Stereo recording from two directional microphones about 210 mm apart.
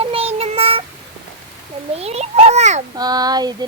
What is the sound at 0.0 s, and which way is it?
Child singing, 25° right (ahead or behind).